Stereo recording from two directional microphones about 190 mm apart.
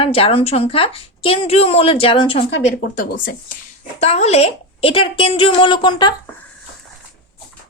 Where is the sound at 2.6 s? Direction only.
45° left (ahead or behind); by 6.1 s 25° left (ahead or behind).